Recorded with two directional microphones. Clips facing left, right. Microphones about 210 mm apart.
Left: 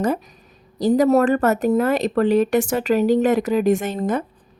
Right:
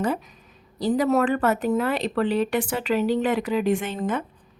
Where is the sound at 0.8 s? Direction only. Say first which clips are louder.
Left 5 dB; 45° left (ahead or behind).